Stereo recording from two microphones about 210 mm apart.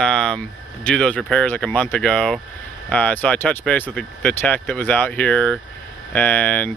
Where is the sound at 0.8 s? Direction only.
5° left (ahead or behind).